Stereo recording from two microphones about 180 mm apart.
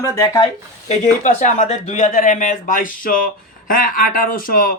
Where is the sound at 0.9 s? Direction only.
45° left (ahead or behind).